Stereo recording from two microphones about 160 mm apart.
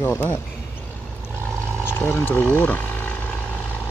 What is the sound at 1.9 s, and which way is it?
Speech, 15° left (ahead or behind).